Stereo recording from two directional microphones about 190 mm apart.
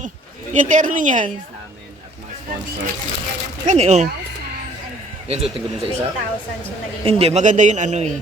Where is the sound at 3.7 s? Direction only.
40° right (ahead or behind).